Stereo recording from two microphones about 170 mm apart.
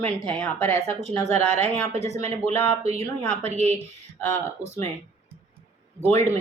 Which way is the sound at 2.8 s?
40° right (ahead or behind).